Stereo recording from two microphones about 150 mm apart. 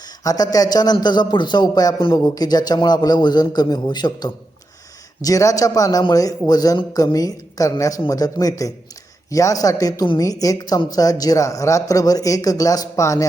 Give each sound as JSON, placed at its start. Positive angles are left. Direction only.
{"t": 0.3, "sound": "speech", "side_deg": 25}